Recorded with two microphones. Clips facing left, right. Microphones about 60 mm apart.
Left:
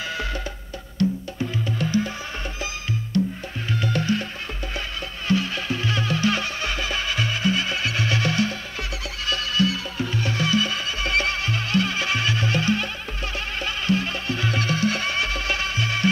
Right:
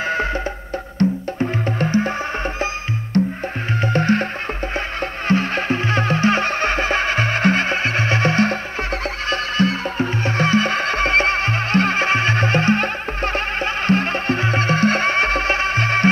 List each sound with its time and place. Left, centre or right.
0.1 s music: right
3.1 s music: right
5.3 s music: right